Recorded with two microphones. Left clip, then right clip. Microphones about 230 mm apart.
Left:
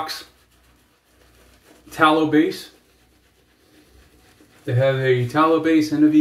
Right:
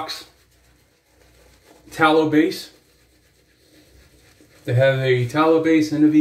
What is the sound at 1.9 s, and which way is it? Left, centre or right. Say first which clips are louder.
Speech: even; centre.